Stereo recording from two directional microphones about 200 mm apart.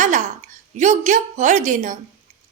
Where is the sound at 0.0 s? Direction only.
40° right (ahead or behind).